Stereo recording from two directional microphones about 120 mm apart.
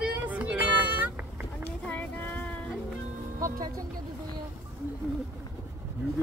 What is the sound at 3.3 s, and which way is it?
Speech, 30° right (ahead or behind).